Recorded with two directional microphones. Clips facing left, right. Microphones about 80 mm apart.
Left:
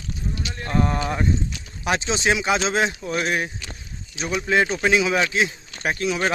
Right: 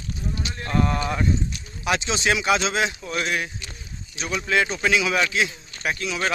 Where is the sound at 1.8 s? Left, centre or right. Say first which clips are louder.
Left 1 dB; left.